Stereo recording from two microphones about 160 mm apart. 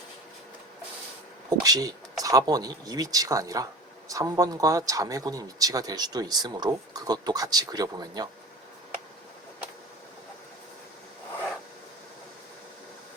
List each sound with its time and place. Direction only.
1.5 s speech: 25° right (ahead or behind)